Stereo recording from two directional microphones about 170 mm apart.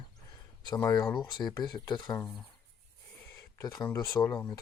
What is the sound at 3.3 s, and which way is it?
Speech, 20° left (ahead or behind).